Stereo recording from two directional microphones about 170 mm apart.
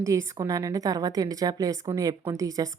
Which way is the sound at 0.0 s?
20° right (ahead or behind).